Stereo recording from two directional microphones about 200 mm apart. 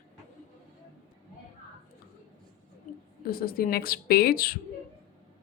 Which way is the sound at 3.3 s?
45° left (ahead or behind).